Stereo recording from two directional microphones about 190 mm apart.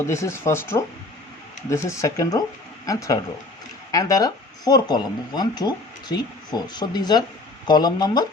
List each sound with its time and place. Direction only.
0.1 s speech: 15° left (ahead or behind)